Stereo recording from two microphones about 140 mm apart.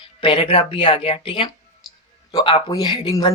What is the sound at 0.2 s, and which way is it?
Speech, 40° left (ahead or behind).